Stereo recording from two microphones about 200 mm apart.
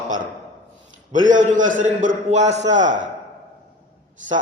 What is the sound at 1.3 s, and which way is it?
A man's voice, 40° right (ahead or behind).